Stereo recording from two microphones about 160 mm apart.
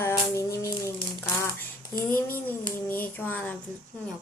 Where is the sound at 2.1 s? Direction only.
15° left (ahead or behind).